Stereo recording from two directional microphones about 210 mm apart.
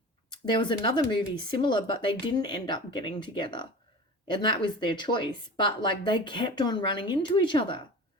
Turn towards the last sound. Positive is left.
turn(degrees=25)  # may be behind; listen again after turning